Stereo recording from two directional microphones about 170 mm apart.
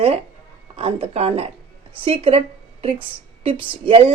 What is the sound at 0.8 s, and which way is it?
A woman's voice, 35° right (ahead or behind).